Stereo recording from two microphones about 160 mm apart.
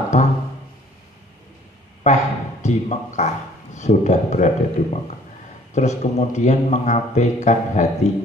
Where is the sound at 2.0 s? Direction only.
45° left (ahead or behind).